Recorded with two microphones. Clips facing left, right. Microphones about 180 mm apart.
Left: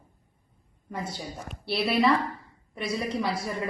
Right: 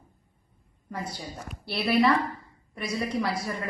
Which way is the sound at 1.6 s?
Centre (ahead or behind).